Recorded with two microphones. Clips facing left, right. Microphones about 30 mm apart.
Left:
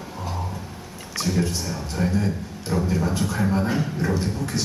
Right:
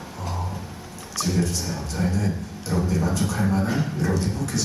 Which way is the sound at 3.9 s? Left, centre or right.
Centre.